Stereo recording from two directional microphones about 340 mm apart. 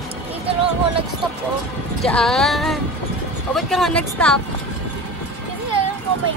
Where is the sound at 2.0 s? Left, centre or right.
Centre.